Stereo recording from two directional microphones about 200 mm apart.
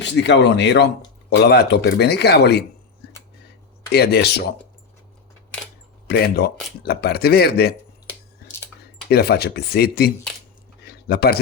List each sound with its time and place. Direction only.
0.0 s speech: 60° left (ahead or behind)
3.0 s music: 55° left (ahead or behind)
3.9 s speech: 55° left (ahead or behind)
6.1 s speech: 50° left (ahead or behind)
9.0 s speech: 55° left (ahead or behind)
10.8 s a sound: 50° left (ahead or behind)